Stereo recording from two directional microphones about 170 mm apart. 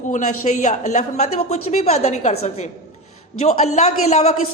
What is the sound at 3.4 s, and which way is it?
Speech, 40° left (ahead or behind).